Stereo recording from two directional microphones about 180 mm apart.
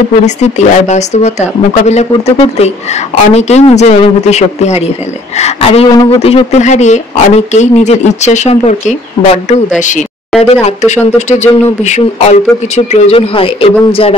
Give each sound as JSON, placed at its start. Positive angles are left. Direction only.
{"t": 0.2, "sound": "speech", "side_deg": 40}